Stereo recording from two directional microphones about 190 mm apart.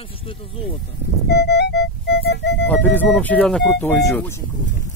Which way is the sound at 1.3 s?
60° left (ahead or behind).